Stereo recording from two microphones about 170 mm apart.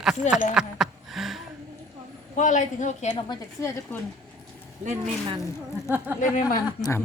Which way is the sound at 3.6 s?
15° left (ahead or behind).